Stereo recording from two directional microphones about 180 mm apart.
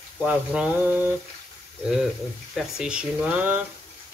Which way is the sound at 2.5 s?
5° right (ahead or behind).